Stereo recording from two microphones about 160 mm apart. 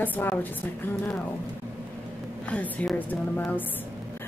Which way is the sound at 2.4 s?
10° left (ahead or behind).